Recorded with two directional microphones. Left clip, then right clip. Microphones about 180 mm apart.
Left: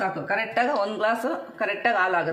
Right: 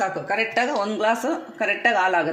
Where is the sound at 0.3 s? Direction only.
40° right (ahead or behind).